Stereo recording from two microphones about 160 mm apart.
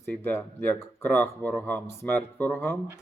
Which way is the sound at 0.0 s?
15° left (ahead or behind).